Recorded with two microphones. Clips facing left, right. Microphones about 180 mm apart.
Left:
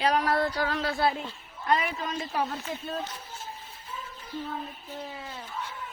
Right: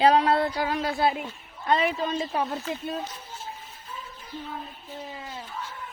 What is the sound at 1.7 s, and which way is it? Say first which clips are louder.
Speech: right 4 dB; 30° right (ahead or behind).